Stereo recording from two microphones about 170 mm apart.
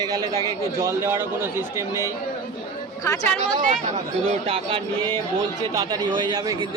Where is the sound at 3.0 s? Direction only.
15° left (ahead or behind).